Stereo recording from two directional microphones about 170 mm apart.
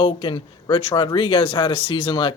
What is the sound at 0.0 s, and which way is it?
Speech, 30° left (ahead or behind).